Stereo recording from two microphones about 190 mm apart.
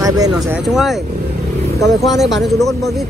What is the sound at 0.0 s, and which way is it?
Speech, 20° right (ahead or behind).